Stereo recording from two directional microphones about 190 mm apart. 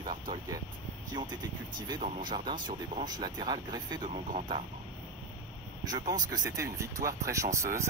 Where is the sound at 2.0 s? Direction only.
45° right (ahead or behind).